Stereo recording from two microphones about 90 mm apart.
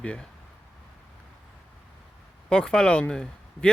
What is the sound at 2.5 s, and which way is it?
Speech, 10° left (ahead or behind).